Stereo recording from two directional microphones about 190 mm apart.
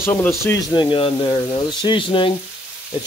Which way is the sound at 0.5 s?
20° left (ahead or behind).